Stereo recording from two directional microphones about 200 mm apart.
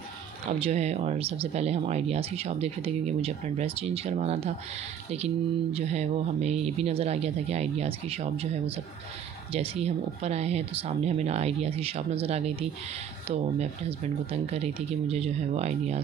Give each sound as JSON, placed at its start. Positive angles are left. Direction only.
{"t": 0.5, "sound": "speech", "side_deg": -30}